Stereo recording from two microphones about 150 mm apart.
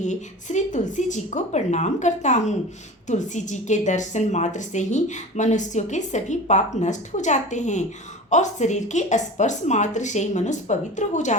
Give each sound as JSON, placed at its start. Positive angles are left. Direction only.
{"t": 0.0, "sound": "a woman's voice", "side_deg": 55}